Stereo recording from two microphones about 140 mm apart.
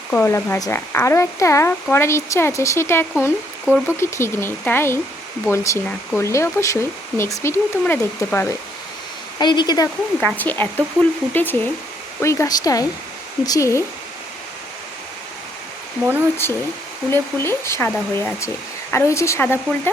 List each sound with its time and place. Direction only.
0.1 s speech: 15° left (ahead or behind)
9.4 s speech: 30° left (ahead or behind)
10.2 s speech: 10° left (ahead or behind)
16.4 s speech: 15° left (ahead or behind)